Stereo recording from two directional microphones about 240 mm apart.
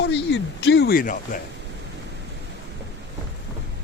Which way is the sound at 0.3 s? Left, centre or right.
Left.